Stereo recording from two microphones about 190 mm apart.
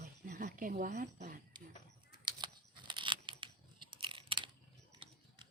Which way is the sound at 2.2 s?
25° right (ahead or behind).